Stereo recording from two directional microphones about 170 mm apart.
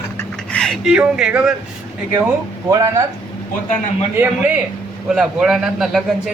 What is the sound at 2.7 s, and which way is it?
Speech, 20° right (ahead or behind).